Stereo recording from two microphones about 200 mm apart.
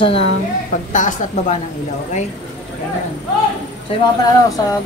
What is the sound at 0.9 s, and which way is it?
Speech, 40° left (ahead or behind).